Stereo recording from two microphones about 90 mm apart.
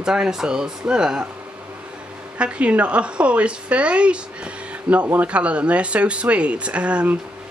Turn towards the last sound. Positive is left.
turn(degrees=-15)  # may be behind; listen again after turning